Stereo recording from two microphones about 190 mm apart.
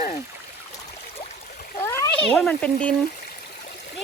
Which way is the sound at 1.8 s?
15° left (ahead or behind).